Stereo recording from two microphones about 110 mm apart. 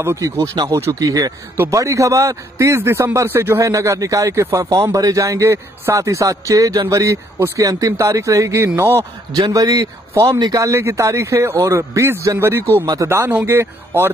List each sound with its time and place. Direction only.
0.0 s a man's voice: 25° right (ahead or behind)
0.4 s a man's voice: 40° right (ahead or behind)
0.7 s a man's voice: 25° right (ahead or behind)
9.3 s a man's voice: 35° right (ahead or behind)